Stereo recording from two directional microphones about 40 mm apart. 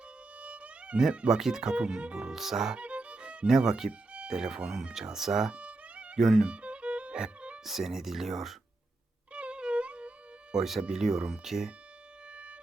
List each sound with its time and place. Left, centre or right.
0.3 s music: right
1.3 s speech: centre
2.3 s speech: centre
2.7 s music: right; by 3.9 s centre
4.3 s speech: centre
5.5 s music: right
6.1 s speech: centre
6.4 s music: right
7.6 s speech: centre
9.3 s music: right
10.5 s speech: centre
12.3 s music: right